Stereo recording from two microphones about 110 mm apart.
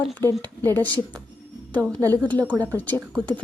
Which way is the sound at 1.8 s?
30° right (ahead or behind).